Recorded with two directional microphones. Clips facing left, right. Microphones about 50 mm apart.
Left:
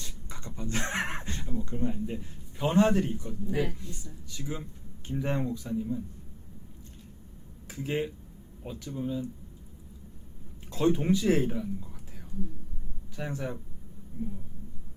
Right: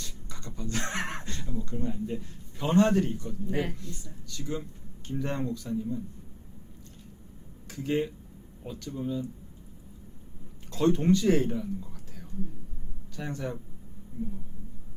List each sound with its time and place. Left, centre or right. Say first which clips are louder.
0.0 s a sound: even; left
1.5 s a man's voice: left 1 dB; centre
7.7 s speech: right 2 dB; centre
10.7 s speech: right 2 dB; centre